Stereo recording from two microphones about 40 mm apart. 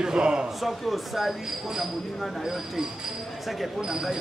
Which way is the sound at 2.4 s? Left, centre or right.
Centre.